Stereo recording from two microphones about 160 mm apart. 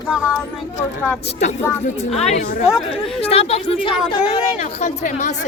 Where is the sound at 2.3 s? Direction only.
45° left (ahead or behind).